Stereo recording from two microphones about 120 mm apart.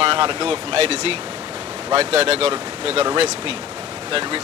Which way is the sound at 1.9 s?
60° right (ahead or behind).